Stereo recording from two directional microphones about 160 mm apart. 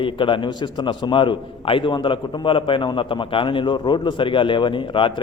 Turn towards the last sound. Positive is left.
turn(degrees=30)  # may be behind; listen again after turning